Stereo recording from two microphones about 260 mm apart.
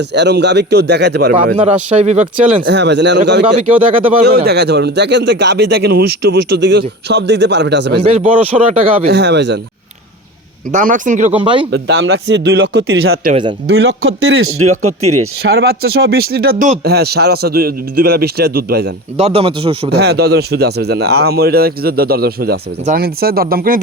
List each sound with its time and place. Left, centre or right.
0.1 s speech: right
2.0 s speech: right
2.6 s speech: right
3.4 s speech: centre
4.2 s speech: right
8.0 s speech: right
9.0 s speech: right
10.7 s speech: right
11.7 s speech: right
15.4 s speech: right
19.2 s speech: right
19.9 s speech: right